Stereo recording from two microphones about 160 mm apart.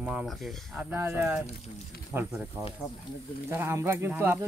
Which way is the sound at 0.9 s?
15° right (ahead or behind).